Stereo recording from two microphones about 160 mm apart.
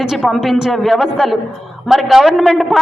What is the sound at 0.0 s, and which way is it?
A man's voice, 5° right (ahead or behind).